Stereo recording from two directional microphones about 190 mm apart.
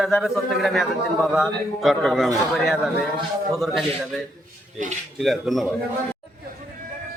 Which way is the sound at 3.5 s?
Centre (ahead or behind).